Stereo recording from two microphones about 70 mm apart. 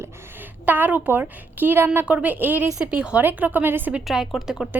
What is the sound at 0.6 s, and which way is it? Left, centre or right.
A woman's voice, right.